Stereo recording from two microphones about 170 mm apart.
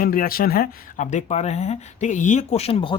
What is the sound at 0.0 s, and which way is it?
Speech, 55° left (ahead or behind).